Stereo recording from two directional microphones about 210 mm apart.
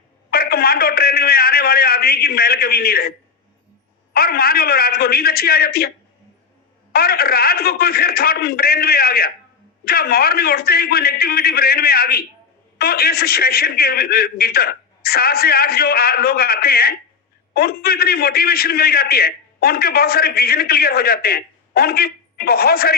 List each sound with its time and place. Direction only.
0.3 s a man's voice: 45° left (ahead or behind)
6.9 s a man's voice: 45° left (ahead or behind)